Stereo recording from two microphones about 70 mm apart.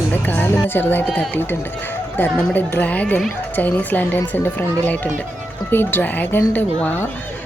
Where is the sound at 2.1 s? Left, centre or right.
Left.